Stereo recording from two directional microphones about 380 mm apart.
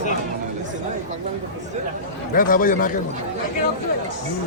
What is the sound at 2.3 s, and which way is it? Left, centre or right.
Speech, left.